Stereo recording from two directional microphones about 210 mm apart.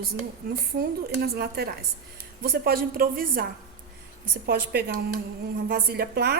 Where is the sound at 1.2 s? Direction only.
50° right (ahead or behind).